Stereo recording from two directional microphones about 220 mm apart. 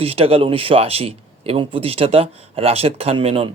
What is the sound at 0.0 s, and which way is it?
A man's voice, 25° right (ahead or behind).